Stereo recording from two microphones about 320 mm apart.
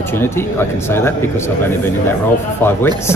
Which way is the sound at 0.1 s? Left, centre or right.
Centre.